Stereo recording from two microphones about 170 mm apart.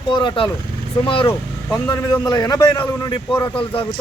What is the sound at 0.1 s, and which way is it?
A man's voice, 30° left (ahead or behind).